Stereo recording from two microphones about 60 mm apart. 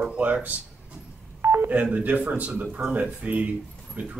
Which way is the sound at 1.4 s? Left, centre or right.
Right.